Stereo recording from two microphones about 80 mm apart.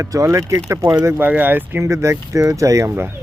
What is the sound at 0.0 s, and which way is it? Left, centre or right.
Speech, right.